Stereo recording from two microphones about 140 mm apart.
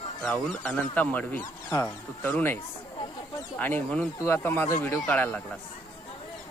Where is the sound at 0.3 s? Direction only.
10° left (ahead or behind).